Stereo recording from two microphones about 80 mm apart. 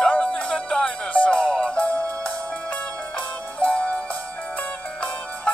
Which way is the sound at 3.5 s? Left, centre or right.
Centre.